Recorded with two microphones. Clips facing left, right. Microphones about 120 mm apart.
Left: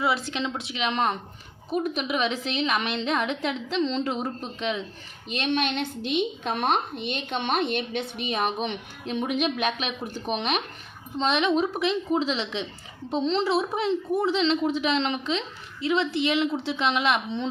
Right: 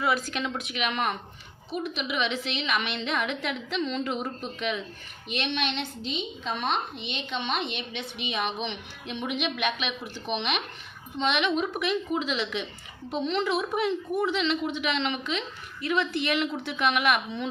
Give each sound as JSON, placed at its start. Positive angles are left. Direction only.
{"t": 0.0, "sound": "a woman's voice", "side_deg": 25}
{"t": 1.7, "sound": "a woman's voice", "side_deg": 40}